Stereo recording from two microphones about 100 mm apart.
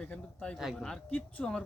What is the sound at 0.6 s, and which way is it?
Speech, 5° right (ahead or behind).